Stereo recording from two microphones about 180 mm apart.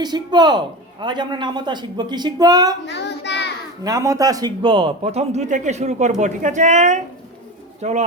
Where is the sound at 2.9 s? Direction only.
75° left (ahead or behind).